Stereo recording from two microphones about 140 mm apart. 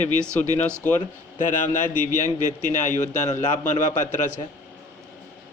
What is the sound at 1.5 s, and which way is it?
A man's voice, 65° left (ahead or behind).